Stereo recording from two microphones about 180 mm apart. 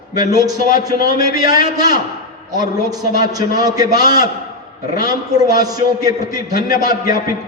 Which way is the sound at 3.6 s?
20° right (ahead or behind).